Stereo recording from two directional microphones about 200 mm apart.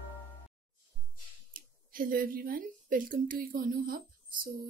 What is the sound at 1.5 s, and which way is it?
Speech, 45° right (ahead or behind).